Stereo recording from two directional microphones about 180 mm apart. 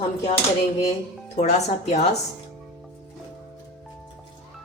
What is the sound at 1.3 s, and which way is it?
Speech, 40° left (ahead or behind).